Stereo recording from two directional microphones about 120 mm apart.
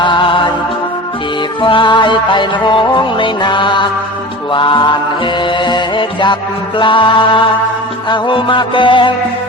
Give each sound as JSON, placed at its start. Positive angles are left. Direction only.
{"t": 0.0, "sound": "music", "side_deg": 45}
{"t": 1.6, "sound": "music", "side_deg": 40}